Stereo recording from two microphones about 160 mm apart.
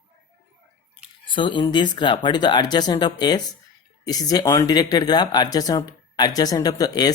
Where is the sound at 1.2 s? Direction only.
30° left (ahead or behind).